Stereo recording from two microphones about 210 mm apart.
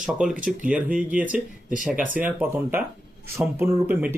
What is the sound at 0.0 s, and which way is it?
Speech, centre (ahead or behind).